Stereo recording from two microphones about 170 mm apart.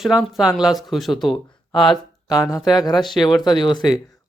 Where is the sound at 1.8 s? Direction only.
25° left (ahead or behind).